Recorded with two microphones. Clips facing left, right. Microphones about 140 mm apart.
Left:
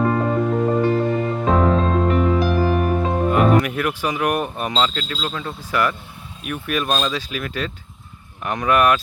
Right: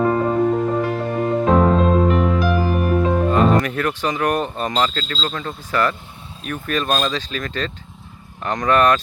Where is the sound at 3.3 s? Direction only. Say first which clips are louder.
Left 3 dB; 10° left (ahead or behind).